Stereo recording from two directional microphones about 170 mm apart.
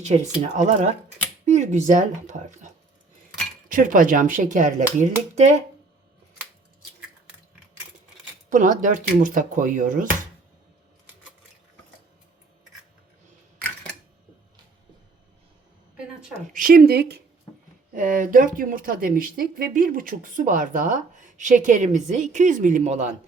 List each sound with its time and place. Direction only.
0.0 s speech: 45° right (ahead or behind)
3.7 s speech: 55° right (ahead or behind)
8.4 s speech: 50° right (ahead or behind)
13.6 s a sound: 5° left (ahead or behind)
16.3 s speech: 50° right (ahead or behind); by 17.2 s 70° right (ahead or behind)
17.9 s speech: 50° right (ahead or behind)